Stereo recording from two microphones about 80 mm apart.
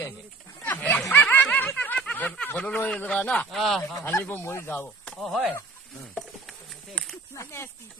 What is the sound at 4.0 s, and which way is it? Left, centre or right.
Speech, left.